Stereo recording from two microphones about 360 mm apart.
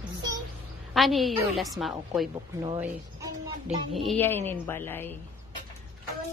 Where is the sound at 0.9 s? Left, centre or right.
Centre.